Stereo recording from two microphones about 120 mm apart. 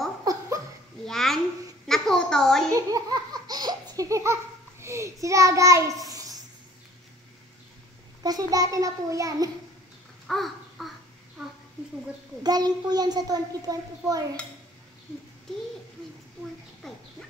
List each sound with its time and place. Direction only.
0.2 s laughter: 30° right (ahead or behind)
1.0 s a sound: 5° left (ahead or behind)
2.7 s laughter: 30° right (ahead or behind)
8.2 s a child's voice: 30° right (ahead or behind)
10.2 s crow: centre (ahead or behind)
12.4 s a child's voice: 35° right (ahead or behind)
16.8 s a sound: 5° left (ahead or behind)